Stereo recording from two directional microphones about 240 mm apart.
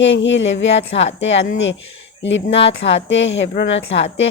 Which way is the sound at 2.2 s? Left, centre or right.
Left.